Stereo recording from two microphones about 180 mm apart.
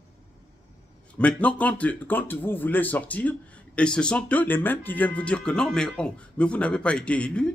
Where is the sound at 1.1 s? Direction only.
5° left (ahead or behind).